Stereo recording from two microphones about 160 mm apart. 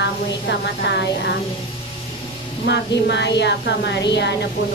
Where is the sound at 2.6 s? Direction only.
90° left.